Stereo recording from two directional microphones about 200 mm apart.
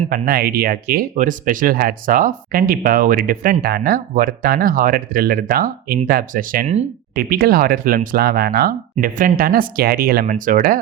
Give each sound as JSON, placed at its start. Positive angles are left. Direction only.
{"t": 0.1, "sound": "speech", "side_deg": -50}